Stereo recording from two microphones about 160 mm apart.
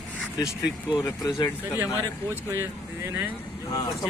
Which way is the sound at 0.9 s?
20° left (ahead or behind).